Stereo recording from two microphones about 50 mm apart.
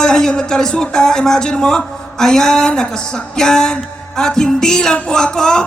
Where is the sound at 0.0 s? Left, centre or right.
Centre.